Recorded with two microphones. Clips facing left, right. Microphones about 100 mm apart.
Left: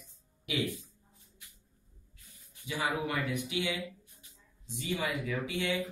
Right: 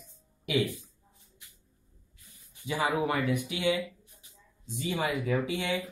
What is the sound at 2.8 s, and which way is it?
Speech, 30° right (ahead or behind).